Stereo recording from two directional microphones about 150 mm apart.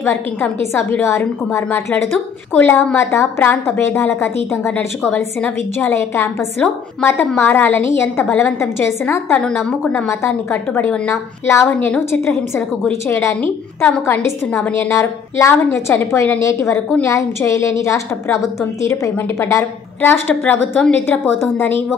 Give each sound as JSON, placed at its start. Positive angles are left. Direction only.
{"t": 0.0, "sound": "a woman's voice", "side_deg": 15}
{"t": 10.0, "sound": "a woman's voice", "side_deg": 20}